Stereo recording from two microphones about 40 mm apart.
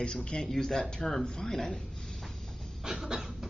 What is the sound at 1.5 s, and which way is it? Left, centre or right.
Speech, centre.